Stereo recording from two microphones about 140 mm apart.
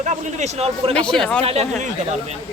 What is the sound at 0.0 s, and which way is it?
Speech, 60° right (ahead or behind).